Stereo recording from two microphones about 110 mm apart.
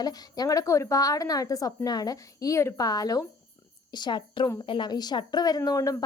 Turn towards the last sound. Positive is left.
turn(degrees=30)  # may be behind; listen again after turning